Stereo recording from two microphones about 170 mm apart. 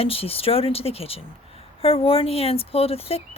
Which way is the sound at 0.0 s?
35° left (ahead or behind).